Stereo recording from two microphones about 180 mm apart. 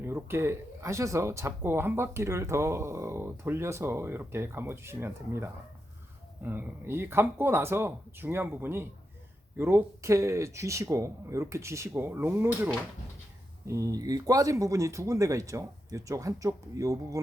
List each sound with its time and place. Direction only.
0.0 s speech: 15° right (ahead or behind)